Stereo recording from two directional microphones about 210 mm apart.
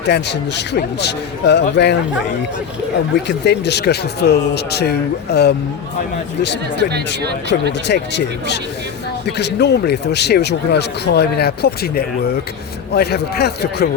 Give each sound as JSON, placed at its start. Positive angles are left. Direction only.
{"t": 0.0, "sound": "speech", "side_deg": 55}
{"t": 3.2, "sound": "speech", "side_deg": 55}
{"t": 7.7, "sound": "speech", "side_deg": 55}